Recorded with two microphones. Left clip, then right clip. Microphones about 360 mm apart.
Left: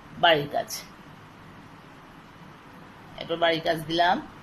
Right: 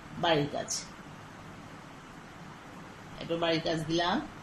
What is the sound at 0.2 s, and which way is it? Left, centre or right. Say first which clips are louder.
Speech: left 7 dB; left.